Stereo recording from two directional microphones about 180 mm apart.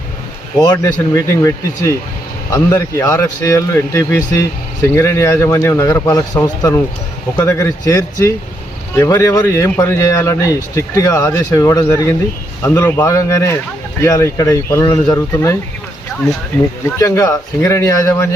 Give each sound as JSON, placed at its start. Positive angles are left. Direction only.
{"t": 0.6, "sound": "speech", "side_deg": 20}
{"t": 16.8, "sound": "speech", "side_deg": 20}